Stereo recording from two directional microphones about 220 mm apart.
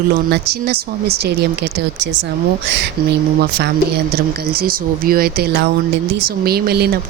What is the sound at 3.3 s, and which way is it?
Speech, 45° right (ahead or behind).